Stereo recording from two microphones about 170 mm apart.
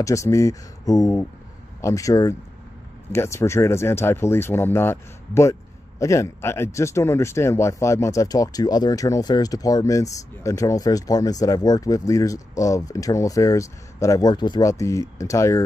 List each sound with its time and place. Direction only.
0.0 s speech: 20° left (ahead or behind)